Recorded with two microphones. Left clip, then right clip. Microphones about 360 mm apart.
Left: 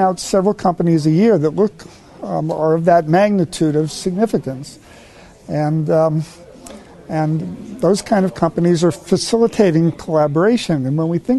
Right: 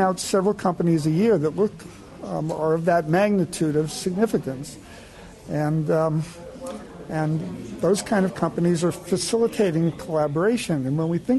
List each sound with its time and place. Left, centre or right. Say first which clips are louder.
0.0 s speech: left 6 dB; left